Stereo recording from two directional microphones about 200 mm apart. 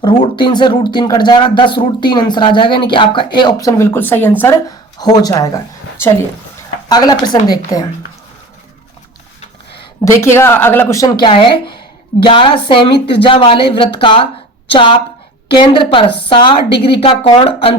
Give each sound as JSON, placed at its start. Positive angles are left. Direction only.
{"t": 0.0, "sound": "speech", "side_deg": 25}
{"t": 6.8, "sound": "speech", "side_deg": 20}
{"t": 10.0, "sound": "speech", "side_deg": 15}